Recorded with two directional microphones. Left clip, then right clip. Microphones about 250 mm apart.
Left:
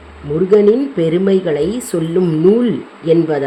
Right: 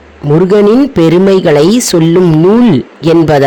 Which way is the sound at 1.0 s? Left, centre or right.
Right.